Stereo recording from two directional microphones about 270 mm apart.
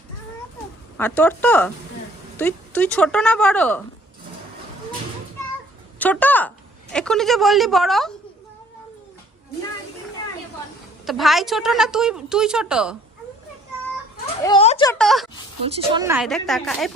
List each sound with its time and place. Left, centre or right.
0.9 s a woman's voice: centre
6.0 s a woman's voice: centre
11.0 s a woman's voice: centre
14.4 s a sound: left
14.8 s a woman's voice: centre
15.6 s a woman's voice: centre